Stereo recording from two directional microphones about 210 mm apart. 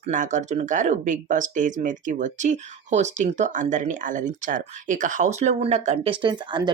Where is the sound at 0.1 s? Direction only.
35° right (ahead or behind).